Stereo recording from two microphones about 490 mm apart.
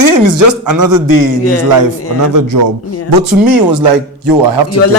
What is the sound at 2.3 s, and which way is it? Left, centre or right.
Speech, right.